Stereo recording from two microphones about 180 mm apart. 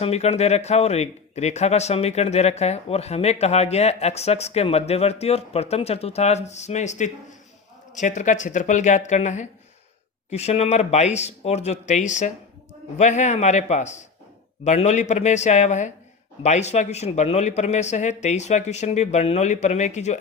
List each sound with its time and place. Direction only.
0.0 s speech: 35° left (ahead or behind)